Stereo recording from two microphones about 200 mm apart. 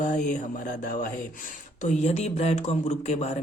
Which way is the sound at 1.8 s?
35° left (ahead or behind).